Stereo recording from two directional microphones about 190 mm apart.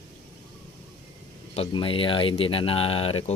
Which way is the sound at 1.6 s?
30° left (ahead or behind).